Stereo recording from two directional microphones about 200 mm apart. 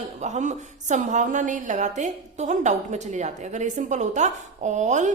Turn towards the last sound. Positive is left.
turn(degrees=-35)  # may be behind; listen again after turning